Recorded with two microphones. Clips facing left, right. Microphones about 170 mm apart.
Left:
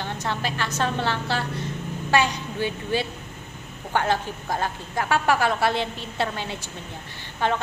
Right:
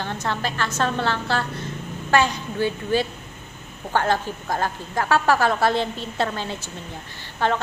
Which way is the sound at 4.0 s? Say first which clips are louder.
Right 1 dB; 45° right (ahead or behind).